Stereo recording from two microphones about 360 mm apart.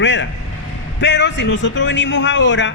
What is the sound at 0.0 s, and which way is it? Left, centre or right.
A man's voice, left.